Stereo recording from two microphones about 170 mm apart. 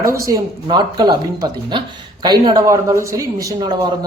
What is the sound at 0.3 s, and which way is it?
Speech, 25° right (ahead or behind).